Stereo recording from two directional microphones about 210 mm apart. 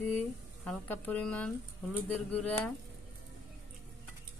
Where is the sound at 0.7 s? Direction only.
10° left (ahead or behind).